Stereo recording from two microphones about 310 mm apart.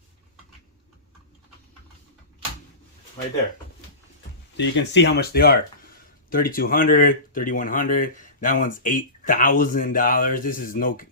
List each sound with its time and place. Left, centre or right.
4.5 s speech: left